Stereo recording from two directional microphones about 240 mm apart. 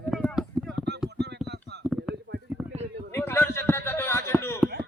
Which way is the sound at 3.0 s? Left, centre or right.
Centre.